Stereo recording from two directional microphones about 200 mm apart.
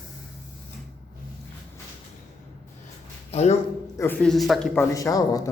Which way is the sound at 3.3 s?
30° left (ahead or behind).